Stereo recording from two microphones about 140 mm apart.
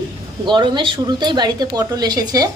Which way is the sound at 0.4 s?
35° right (ahead or behind).